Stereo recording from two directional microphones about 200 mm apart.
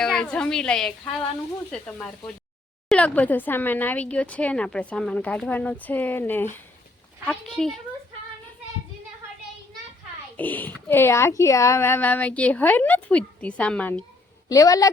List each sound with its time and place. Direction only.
0.0 s a woman's voice: 5° left (ahead or behind)
10.3 s speech: 10° left (ahead or behind)
14.5 s speech: 15° left (ahead or behind)